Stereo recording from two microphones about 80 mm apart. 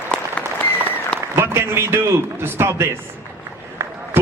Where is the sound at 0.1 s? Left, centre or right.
Left.